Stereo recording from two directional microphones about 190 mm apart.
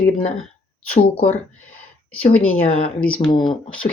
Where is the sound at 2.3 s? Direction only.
10° left (ahead or behind).